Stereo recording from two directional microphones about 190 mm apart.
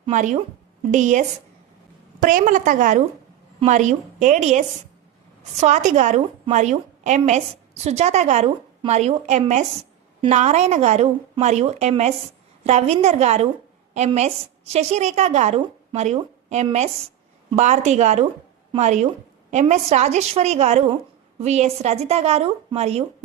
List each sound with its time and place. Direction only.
0.1 s a woman's voice: 40° right (ahead or behind)
2.2 s a woman's voice: 45° right (ahead or behind)